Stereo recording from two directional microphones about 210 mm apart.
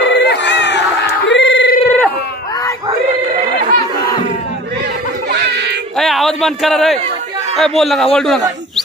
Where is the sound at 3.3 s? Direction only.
40° right (ahead or behind).